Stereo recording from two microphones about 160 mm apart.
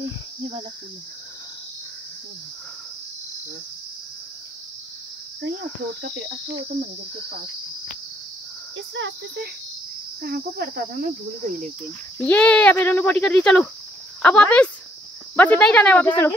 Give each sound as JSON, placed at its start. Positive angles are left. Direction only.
{"t": 0.4, "sound": "cricket", "side_deg": -30}
{"t": 10.2, "sound": "cricket", "side_deg": -70}
{"t": 12.2, "sound": "speech", "side_deg": 10}